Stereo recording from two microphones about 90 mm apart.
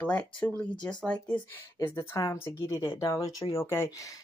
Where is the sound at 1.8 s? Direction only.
35° left (ahead or behind).